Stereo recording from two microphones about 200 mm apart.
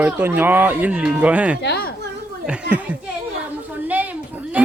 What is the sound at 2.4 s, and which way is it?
Speech, 5° right (ahead or behind).